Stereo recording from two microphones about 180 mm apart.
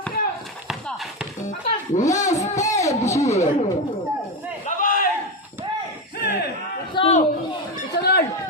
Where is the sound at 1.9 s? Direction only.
40° left (ahead or behind).